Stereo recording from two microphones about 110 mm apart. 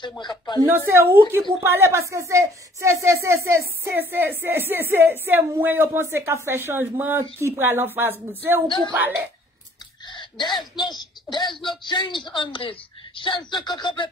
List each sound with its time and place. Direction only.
0.2 s speech: 40° left (ahead or behind)
0.7 s a woman's voice: 20° right (ahead or behind)
10.0 s a sound: 45° left (ahead or behind)
10.5 s speech: centre (ahead or behind)
10.9 s speech: 40° left (ahead or behind)